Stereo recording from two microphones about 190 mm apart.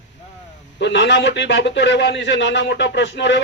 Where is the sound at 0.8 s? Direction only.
70° left (ahead or behind).